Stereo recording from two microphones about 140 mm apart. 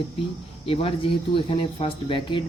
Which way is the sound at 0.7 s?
40° left (ahead or behind).